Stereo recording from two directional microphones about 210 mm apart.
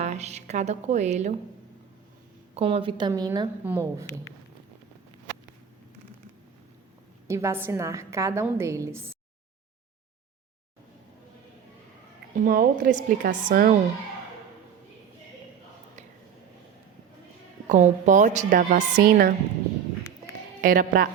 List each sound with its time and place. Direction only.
0.0 s a woman's voice: 30° right (ahead or behind)
2.6 s a woman's voice: 25° right (ahead or behind)
7.3 s a woman's voice: 15° right (ahead or behind)
12.4 s a woman's voice: 40° right (ahead or behind)
17.7 s a woman's voice: 35° right (ahead or behind)
20.6 s a woman's voice: 40° right (ahead or behind)